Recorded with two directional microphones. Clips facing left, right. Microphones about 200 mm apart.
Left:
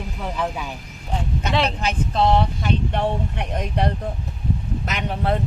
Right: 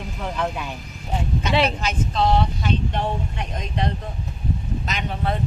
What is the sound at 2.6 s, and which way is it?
A woman's voice, 60° left (ahead or behind).